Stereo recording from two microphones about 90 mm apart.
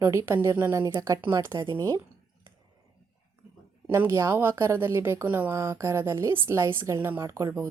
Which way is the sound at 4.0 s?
30° right (ahead or behind).